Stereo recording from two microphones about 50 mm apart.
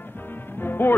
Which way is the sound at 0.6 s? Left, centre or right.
Left.